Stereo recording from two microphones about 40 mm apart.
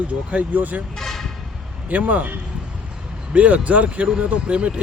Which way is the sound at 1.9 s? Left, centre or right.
Right.